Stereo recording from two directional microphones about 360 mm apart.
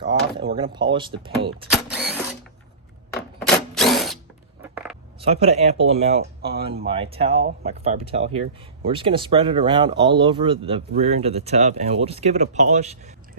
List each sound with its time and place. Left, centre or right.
0.1 s speech: centre
1.9 s mechanisms: centre
3.4 s drill: centre
5.2 s speech: centre